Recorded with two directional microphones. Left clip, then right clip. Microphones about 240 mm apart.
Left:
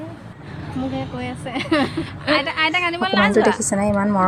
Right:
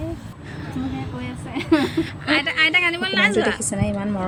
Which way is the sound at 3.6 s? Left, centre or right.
Centre.